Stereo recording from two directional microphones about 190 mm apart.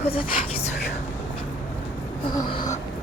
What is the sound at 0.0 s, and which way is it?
Speech, 30° left (ahead or behind).